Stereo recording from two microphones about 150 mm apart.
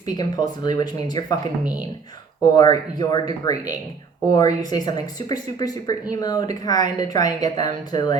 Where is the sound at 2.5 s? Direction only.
25° left (ahead or behind).